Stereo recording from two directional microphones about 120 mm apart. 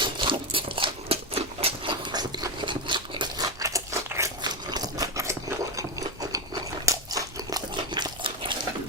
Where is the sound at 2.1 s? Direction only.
35° right (ahead or behind).